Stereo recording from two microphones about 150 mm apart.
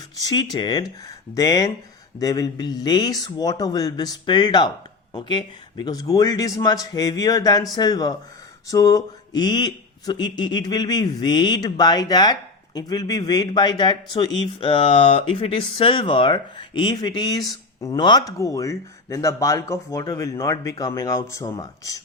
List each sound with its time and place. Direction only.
0.2 s speech: 25° left (ahead or behind)